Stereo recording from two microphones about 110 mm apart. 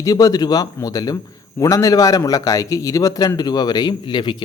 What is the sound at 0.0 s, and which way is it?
A man's voice, 30° left (ahead or behind).